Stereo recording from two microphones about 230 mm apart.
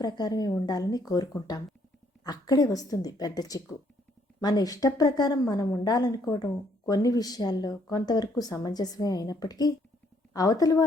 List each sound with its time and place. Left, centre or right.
0.0 s a woman's voice: centre